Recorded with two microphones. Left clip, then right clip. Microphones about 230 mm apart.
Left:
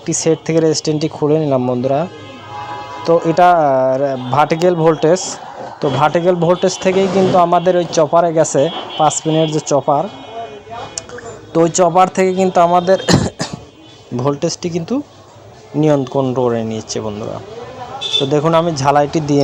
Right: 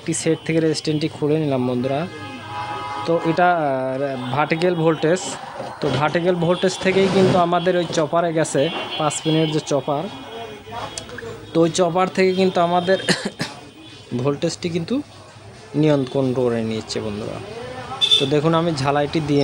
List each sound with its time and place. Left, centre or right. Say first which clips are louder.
0.0 s speech: left 6 dB; centre
11.5 s speech: left 6 dB; centre
18.3 s speech: left 5 dB; centre